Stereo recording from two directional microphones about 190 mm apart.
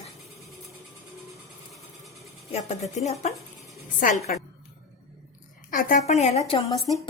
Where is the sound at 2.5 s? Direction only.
35° left (ahead or behind).